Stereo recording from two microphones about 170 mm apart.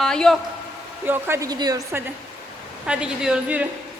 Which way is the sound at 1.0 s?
15° right (ahead or behind).